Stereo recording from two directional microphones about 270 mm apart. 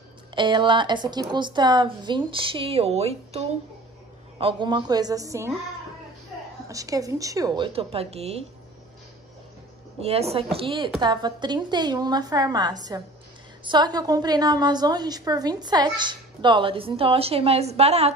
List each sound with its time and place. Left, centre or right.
0.3 s a woman's voice: centre
6.7 s a woman's voice: centre
10.0 s a woman's voice: right